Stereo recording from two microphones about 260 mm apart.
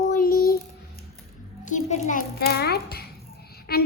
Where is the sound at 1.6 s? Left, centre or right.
Left.